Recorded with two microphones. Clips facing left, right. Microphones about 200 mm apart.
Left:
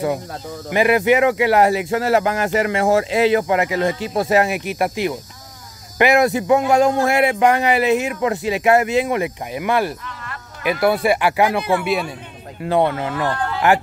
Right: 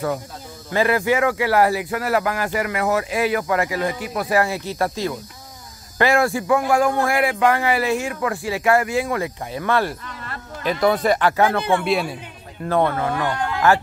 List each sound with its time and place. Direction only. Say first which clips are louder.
0.7 s speech: left 4 dB; 15° left (ahead or behind)
11.8 s speech: even; centre (ahead or behind)
12.6 s speech: left 1 dB; 15° left (ahead or behind)